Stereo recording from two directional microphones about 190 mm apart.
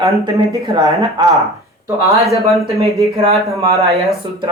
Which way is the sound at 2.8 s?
15° left (ahead or behind).